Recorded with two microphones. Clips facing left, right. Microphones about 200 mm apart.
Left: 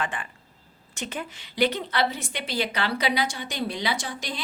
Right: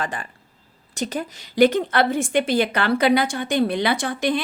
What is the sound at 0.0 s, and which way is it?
A woman's voice, 40° right (ahead or behind).